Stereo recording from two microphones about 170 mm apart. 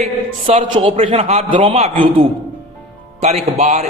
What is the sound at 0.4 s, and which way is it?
A man's voice, 35° right (ahead or behind).